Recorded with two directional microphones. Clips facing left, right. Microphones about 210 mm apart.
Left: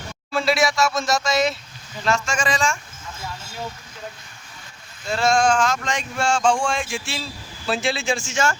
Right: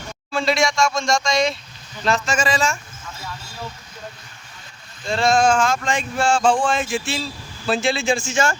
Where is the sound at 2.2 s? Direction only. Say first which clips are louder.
Right 3 dB; 25° right (ahead or behind).